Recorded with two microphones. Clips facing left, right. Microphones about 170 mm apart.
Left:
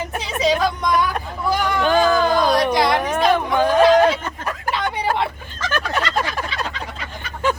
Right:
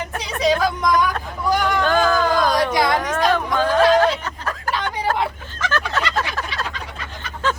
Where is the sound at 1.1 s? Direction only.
15° left (ahead or behind).